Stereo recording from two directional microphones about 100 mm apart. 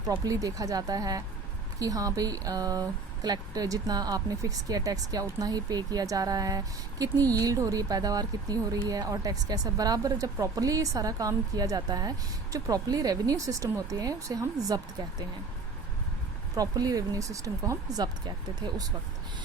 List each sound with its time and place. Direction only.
0.0 s speech: 35° right (ahead or behind)
16.6 s speech: 40° right (ahead or behind)